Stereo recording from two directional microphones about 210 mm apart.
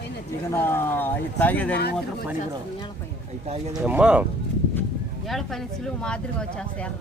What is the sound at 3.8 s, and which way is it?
Speech, 5° right (ahead or behind).